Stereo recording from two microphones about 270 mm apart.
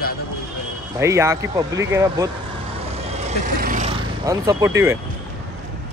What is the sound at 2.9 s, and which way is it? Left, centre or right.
Vehicle, right.